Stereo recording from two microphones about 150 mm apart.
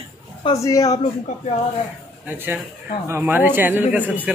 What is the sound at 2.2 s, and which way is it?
A man's voice, 15° right (ahead or behind).